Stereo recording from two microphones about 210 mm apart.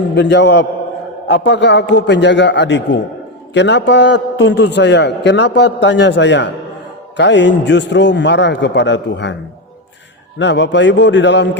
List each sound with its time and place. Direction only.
0.2 s a man's voice: 55° left (ahead or behind)
10.3 s a man's voice: 55° left (ahead or behind)